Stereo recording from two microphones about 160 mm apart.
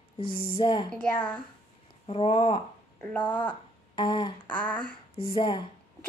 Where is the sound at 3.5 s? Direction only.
30° left (ahead or behind).